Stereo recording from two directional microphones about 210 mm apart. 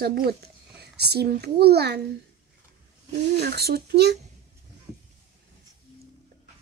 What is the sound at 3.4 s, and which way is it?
Speech, 50° right (ahead or behind).